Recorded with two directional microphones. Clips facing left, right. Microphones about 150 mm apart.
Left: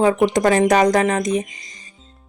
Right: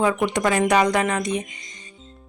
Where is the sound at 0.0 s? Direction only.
35° left (ahead or behind).